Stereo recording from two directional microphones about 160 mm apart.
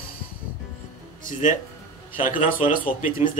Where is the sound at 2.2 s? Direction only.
55° left (ahead or behind).